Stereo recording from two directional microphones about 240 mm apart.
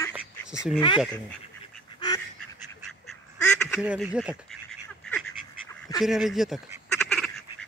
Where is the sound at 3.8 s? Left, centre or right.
Centre.